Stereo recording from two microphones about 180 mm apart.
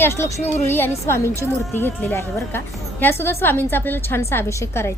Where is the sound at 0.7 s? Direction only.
10° left (ahead or behind).